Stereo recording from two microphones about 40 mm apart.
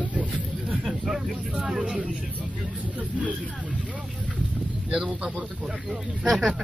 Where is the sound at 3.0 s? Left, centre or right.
Right.